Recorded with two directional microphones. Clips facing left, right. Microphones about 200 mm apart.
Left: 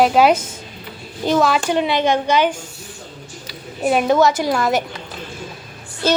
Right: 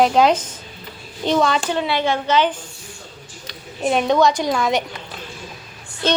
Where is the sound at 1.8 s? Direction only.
15° left (ahead or behind).